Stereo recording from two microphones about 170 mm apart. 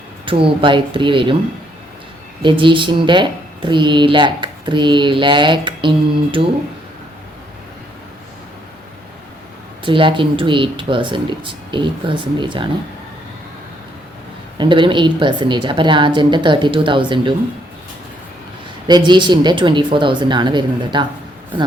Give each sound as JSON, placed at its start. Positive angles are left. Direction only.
{"t": 0.3, "sound": "speech", "side_deg": -30}
{"t": 2.4, "sound": "speech", "side_deg": -30}
{"t": 9.8, "sound": "speech", "side_deg": -30}
{"t": 14.6, "sound": "speech", "side_deg": -30}
{"t": 18.9, "sound": "speech", "side_deg": -25}